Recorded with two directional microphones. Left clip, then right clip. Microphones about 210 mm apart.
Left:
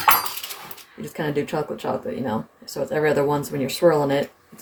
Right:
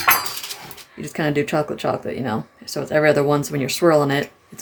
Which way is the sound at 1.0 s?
30° right (ahead or behind).